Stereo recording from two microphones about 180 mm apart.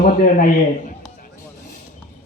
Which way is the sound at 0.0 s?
50° left (ahead or behind).